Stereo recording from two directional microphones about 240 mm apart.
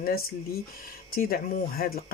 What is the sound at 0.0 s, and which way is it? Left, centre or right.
Speech, left.